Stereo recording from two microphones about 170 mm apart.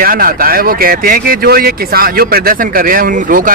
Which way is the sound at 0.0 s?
60° right (ahead or behind).